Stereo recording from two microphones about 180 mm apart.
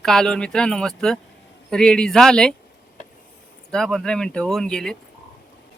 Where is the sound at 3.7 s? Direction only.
Centre (ahead or behind).